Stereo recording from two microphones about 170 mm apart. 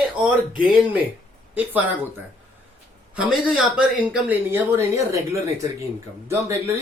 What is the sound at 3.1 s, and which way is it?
A woman's voice, 5° right (ahead or behind).